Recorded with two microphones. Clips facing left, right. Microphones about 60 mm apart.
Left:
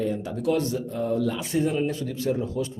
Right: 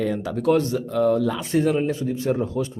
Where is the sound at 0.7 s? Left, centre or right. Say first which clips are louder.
Right 6 dB; right.